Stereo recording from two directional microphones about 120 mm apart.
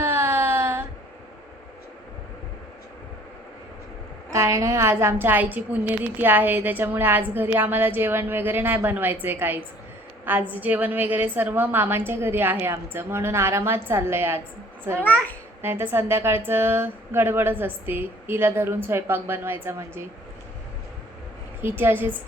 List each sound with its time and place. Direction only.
0.0 s a sound: 20° right (ahead or behind)
4.3 s a woman's voice: 25° right (ahead or behind)
15.0 s a child's voice: 15° left (ahead or behind)
15.6 s speech: 20° right (ahead or behind)
21.6 s a woman's voice: 20° right (ahead or behind)